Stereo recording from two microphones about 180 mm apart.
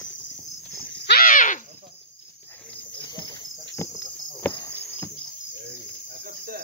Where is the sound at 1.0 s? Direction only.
55° left (ahead or behind).